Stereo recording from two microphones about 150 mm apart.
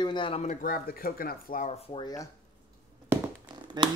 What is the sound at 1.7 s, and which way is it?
Speech, 35° left (ahead or behind).